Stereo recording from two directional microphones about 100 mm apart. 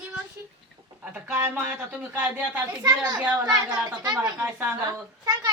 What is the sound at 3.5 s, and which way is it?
Speech, 35° right (ahead or behind).